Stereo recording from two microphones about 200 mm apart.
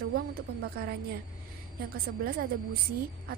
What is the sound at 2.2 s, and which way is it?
Speech, 50° right (ahead or behind).